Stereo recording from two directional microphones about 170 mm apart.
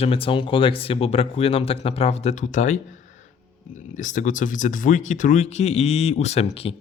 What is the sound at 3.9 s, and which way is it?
Speech, 45° left (ahead or behind).